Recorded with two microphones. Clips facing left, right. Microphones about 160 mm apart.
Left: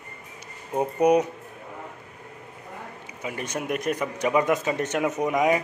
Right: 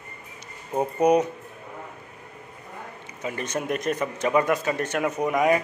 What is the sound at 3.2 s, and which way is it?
A man's voice, 10° left (ahead or behind).